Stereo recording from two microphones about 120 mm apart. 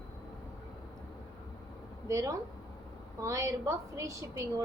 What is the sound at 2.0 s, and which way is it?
A woman's voice, 25° right (ahead or behind).